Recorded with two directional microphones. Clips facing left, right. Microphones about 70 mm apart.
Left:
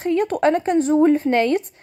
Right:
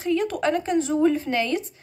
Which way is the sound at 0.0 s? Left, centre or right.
Left.